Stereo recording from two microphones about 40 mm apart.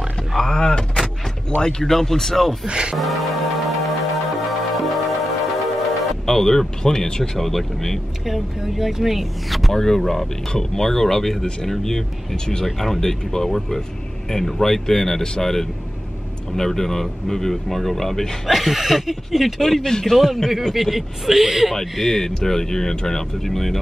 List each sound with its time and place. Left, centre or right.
0.4 s speech: left
2.7 s speech: right
3.0 s music: centre
7.4 s speech: centre
8.5 s speech: centre
9.8 s speech: centre
18.5 s speech: centre
19.6 s speech: centre
20.7 s speech: centre
21.7 s speech: centre